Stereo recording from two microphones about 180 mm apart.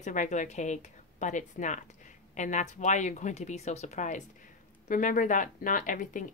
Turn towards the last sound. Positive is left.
turn(degrees=45)  # may be behind; listen again after turning